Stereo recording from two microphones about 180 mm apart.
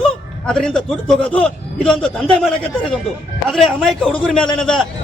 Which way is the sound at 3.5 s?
Centre (ahead or behind).